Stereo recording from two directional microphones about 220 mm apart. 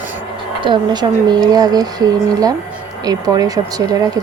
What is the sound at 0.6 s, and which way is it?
Speech, 20° right (ahead or behind).